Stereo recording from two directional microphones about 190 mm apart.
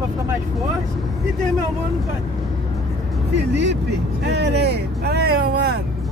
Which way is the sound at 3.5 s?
65° right (ahead or behind).